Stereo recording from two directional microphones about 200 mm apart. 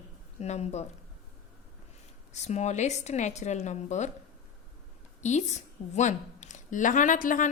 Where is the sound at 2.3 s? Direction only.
35° left (ahead or behind).